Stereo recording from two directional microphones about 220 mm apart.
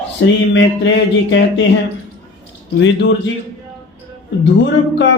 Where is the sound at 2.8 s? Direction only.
50° left (ahead or behind).